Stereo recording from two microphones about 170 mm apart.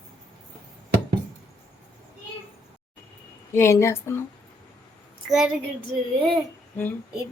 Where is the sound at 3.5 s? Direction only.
15° left (ahead or behind).